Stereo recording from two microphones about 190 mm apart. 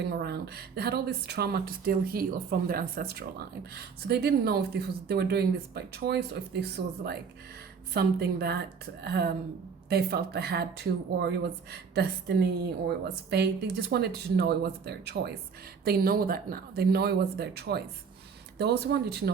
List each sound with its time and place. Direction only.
0.0 s speech: 55° right (ahead or behind)